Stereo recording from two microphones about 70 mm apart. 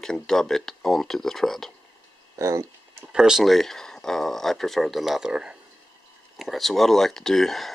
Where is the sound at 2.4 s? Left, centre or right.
Right.